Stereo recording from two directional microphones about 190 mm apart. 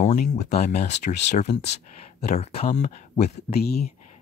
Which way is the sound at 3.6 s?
55° left (ahead or behind).